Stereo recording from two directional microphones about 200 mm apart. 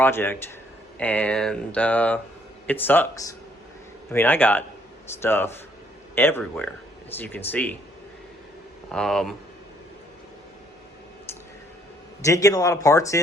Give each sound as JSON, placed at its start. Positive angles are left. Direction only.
{"t": 0.0, "sound": "speech", "side_deg": 10}
{"t": 8.9, "sound": "speech", "side_deg": 0}
{"t": 12.2, "sound": "speech", "side_deg": 15}